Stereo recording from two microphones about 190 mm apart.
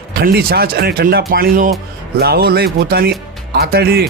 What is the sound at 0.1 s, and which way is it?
Speech, 55° right (ahead or behind).